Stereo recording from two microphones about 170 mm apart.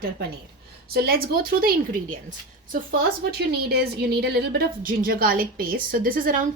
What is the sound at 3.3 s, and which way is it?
A woman's voice, 70° right (ahead or behind).